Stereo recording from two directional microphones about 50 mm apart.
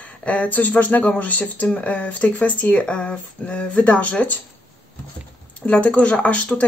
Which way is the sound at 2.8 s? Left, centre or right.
Left.